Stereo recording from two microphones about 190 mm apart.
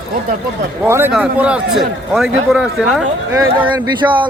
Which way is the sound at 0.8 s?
15° right (ahead or behind).